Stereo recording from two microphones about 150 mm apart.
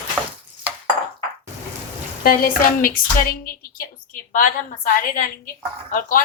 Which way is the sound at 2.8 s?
70° left (ahead or behind).